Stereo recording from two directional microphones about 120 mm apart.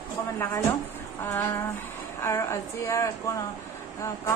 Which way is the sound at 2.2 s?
25° left (ahead or behind).